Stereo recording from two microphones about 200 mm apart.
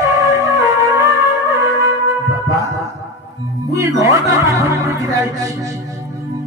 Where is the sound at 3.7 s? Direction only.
15° right (ahead or behind).